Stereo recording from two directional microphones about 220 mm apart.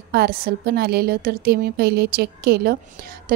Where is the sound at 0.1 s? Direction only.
45° right (ahead or behind).